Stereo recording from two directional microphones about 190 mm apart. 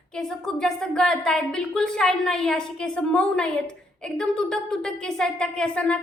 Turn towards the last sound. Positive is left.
turn(degrees=5)  # may be behind; listen again after turning